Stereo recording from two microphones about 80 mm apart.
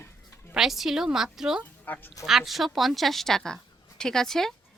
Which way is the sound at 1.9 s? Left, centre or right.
Left.